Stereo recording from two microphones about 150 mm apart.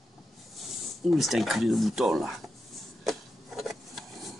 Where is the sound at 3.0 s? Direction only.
Centre (ahead or behind).